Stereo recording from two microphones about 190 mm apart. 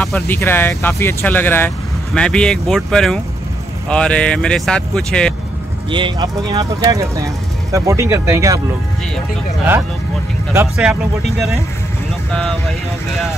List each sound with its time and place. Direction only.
0.0 s speech: 5° left (ahead or behind)
5.9 s speech: 25° right (ahead or behind)
10.5 s speech: 15° right (ahead or behind)
10.9 s speech: centre (ahead or behind)